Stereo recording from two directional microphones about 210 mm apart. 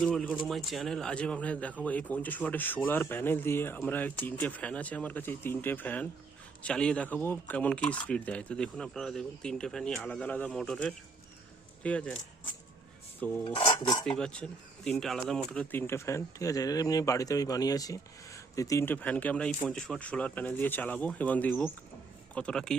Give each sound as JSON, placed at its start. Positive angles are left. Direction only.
{"t": 0.0, "sound": "a man's voice", "side_deg": 5}
{"t": 13.1, "sound": "filing", "side_deg": 10}
{"t": 13.4, "sound": "dishes", "side_deg": 25}
{"t": 14.0, "sound": "a man's voice", "side_deg": 5}